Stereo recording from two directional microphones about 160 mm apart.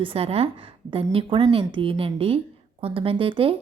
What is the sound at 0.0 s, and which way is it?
A woman's voice, 35° right (ahead or behind).